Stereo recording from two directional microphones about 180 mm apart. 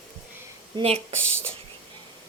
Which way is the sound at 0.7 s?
25° right (ahead or behind).